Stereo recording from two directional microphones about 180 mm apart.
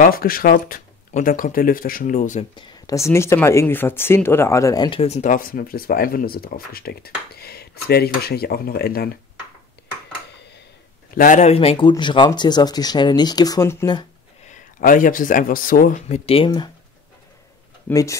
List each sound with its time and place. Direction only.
0.0 s speech: 55° left (ahead or behind)
2.5 s speech: 15° left (ahead or behind); by 9.1 s 60° left (ahead or behind)
11.1 s speech: 45° left (ahead or behind); by 14.0 s 20° left (ahead or behind)
14.5 s speech: 50° left (ahead or behind); by 16.7 s 25° left (ahead or behind)
17.8 s speech: 15° left (ahead or behind)